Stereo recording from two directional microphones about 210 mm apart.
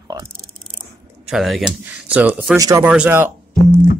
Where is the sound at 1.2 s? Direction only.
Centre (ahead or behind).